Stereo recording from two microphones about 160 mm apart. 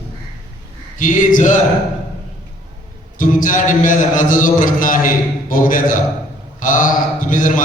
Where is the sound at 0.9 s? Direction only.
55° left (ahead or behind).